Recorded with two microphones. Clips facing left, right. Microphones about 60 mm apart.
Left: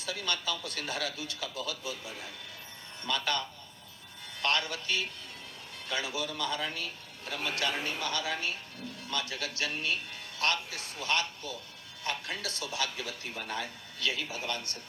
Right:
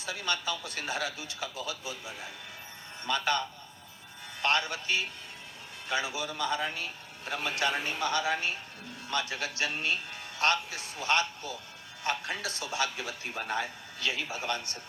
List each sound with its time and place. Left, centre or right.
0.0 s a man's voice: centre